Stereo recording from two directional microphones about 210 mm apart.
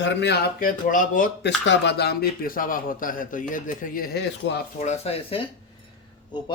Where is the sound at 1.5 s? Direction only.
55° left (ahead or behind).